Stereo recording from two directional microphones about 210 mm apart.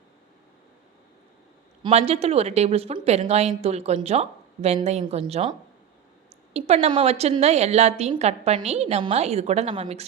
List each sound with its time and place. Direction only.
1.8 s a woman's voice: 30° right (ahead or behind)